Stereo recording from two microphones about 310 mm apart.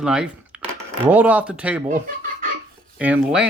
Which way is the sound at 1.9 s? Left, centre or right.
Right.